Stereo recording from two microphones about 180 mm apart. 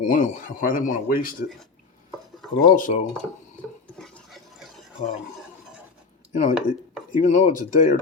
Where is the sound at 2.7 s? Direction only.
45° left (ahead or behind).